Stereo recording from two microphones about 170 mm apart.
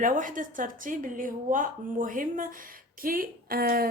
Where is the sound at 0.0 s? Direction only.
50° right (ahead or behind).